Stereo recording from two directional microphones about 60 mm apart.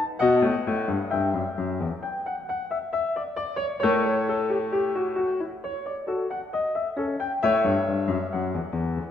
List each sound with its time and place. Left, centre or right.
0.2 s music: left
3.8 s music: left; by 7.2 s centre
7.4 s music: centre
7.7 s music: centre
8.4 s music: left